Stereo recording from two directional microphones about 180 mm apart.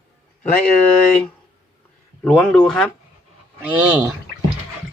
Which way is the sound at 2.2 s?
5° left (ahead or behind).